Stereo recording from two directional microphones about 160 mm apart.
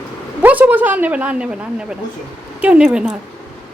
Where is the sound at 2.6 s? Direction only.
5° right (ahead or behind).